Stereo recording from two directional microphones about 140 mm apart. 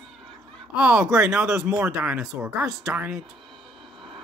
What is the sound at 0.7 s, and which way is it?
Speech, 5° right (ahead or behind).